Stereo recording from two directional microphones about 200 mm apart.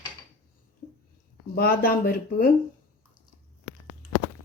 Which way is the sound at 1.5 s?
50° left (ahead or behind).